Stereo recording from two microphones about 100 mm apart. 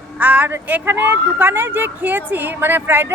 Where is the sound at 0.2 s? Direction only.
15° right (ahead or behind).